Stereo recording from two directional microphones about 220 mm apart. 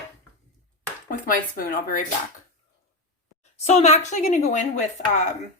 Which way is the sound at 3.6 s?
30° left (ahead or behind).